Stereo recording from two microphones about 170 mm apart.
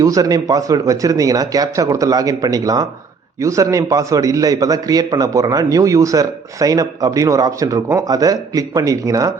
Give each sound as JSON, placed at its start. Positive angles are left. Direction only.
{"t": 0.0, "sound": "a man's voice", "side_deg": -20}